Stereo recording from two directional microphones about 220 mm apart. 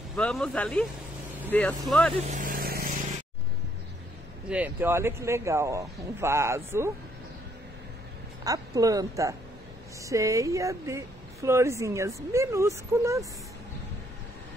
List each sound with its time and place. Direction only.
0.1 s speech: 5° left (ahead or behind)
2.3 s vehicle: 40° right (ahead or behind)
4.5 s speech: 10° right (ahead or behind)
8.5 s speech: 15° right (ahead or behind)